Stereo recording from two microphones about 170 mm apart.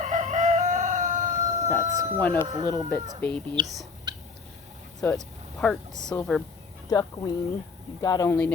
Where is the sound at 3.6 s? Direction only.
25° right (ahead or behind).